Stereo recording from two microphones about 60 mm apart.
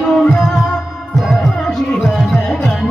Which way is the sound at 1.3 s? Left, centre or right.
Centre.